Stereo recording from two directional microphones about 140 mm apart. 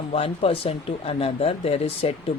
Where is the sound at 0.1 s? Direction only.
45° left (ahead or behind).